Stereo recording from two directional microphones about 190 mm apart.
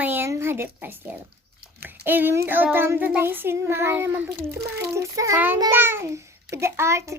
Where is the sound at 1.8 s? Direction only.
10° right (ahead or behind).